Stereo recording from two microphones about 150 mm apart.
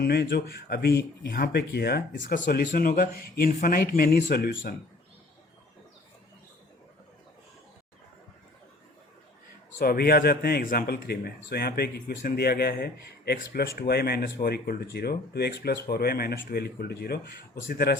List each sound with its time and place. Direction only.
0.0 s speech: 90° left
9.7 s speech: 85° left